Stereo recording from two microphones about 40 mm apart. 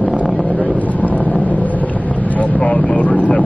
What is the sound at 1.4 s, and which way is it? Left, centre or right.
Boat, left.